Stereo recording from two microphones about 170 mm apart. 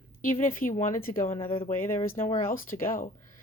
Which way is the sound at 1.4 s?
35° left (ahead or behind).